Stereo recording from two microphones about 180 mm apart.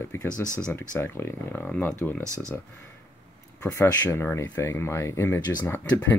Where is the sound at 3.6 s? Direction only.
10° left (ahead or behind).